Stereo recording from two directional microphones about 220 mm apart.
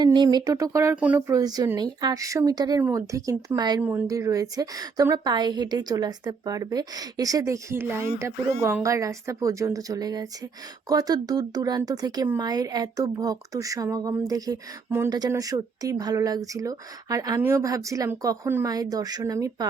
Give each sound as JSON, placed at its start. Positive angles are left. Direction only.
{"t": 0.0, "sound": "speech", "side_deg": -20}